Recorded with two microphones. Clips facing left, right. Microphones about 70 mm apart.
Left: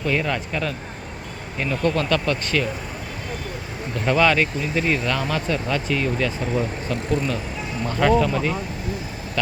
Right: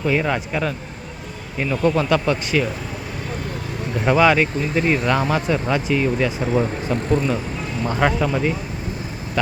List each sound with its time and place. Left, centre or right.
0.0 s speech: centre
4.0 s speech: centre